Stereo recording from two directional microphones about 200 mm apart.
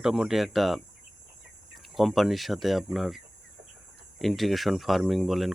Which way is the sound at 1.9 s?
Centre (ahead or behind).